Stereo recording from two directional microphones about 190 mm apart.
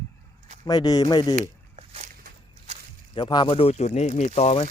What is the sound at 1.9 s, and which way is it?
Walk, 35° right (ahead or behind).